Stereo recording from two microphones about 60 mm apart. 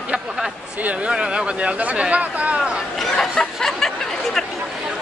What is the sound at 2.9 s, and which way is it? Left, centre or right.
Chatter, centre.